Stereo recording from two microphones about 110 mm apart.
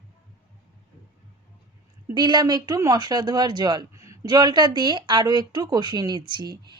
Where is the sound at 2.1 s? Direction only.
40° right (ahead or behind).